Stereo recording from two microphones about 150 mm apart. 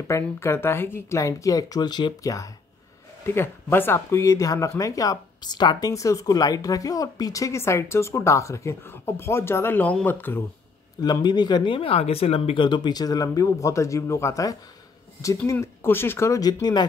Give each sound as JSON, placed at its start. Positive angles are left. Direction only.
{"t": 0.1, "sound": "speech", "side_deg": 15}
{"t": 11.0, "sound": "speech", "side_deg": 30}